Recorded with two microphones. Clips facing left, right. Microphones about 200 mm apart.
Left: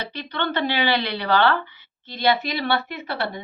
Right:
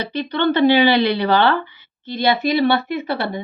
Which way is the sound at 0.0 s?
15° right (ahead or behind).